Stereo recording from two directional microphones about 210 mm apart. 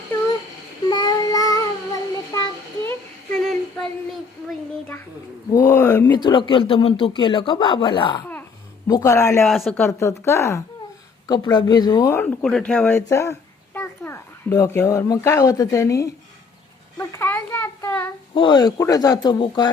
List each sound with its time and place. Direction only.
0.9 s child singing: 20° left (ahead or behind)
3.3 s female singing: centre (ahead or behind)
4.4 s a sound: 5° left (ahead or behind)
6.1 s speech: 20° left (ahead or behind)
9.4 s speech: centre (ahead or behind)
12.4 s a child's voice: 5° left (ahead or behind)
17.0 s a sound: 15° left (ahead or behind)
18.3 s speech: 20° left (ahead or behind)